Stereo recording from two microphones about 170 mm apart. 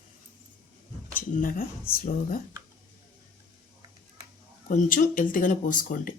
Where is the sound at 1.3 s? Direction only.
55° left (ahead or behind).